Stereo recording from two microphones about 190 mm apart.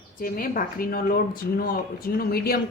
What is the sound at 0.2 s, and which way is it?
A woman's voice, 50° left (ahead or behind).